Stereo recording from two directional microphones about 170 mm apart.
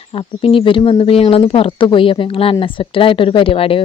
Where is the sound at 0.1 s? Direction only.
35° left (ahead or behind).